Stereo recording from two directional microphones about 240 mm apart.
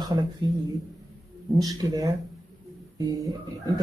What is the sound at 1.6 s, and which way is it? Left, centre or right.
Speech, centre.